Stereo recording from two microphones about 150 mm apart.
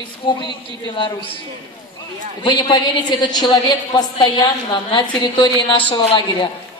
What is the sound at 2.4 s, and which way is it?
A woman's voice, 30° left (ahead or behind).